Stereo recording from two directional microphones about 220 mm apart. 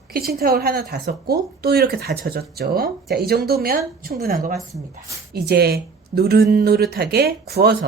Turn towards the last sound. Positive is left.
turn(degrees=-45)  # may be behind; listen again after turning